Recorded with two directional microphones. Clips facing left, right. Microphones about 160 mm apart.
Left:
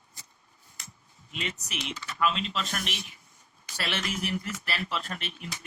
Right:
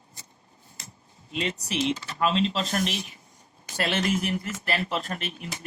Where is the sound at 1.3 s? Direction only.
35° right (ahead or behind).